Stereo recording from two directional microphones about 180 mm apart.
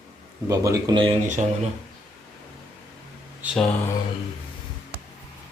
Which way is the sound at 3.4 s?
5° right (ahead or behind).